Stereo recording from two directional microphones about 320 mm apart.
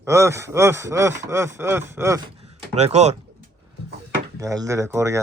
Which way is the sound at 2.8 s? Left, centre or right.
Centre.